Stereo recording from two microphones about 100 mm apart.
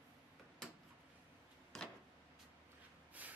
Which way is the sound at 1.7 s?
5° left (ahead or behind).